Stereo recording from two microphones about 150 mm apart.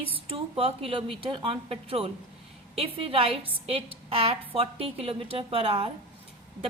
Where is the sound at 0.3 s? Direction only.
40° right (ahead or behind).